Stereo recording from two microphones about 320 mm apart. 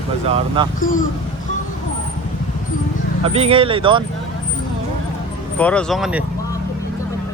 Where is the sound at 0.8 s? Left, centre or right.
Left.